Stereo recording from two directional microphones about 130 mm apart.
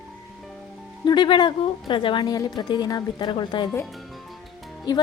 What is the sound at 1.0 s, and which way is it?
A woman's voice, 35° left (ahead or behind).